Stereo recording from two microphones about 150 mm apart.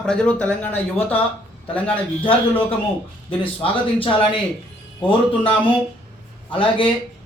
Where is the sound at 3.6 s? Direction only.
35° left (ahead or behind).